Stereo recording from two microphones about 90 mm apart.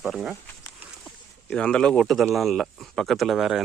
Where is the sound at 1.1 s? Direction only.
10° left (ahead or behind).